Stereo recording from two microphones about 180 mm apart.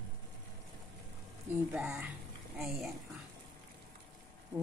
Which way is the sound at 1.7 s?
5° right (ahead or behind).